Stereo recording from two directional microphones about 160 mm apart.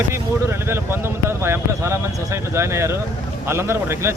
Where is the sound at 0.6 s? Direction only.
15° right (ahead or behind).